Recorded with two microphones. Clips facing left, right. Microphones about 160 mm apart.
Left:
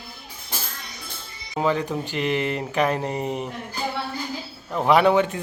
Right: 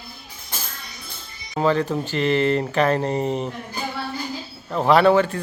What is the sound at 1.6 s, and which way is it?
Speech, 10° left (ahead or behind).